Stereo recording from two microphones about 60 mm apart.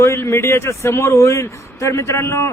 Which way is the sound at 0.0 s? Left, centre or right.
Left.